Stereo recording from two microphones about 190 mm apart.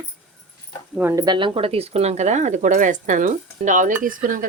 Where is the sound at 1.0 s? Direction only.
15° right (ahead or behind).